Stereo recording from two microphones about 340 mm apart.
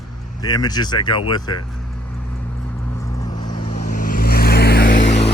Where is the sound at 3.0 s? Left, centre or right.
Centre.